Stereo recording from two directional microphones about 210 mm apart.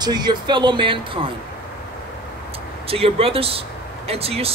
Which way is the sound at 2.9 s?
25° right (ahead or behind).